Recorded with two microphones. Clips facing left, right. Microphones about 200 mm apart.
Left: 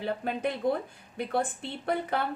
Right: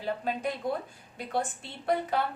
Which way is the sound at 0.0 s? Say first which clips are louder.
Left 1 dB; 60° left (ahead or behind).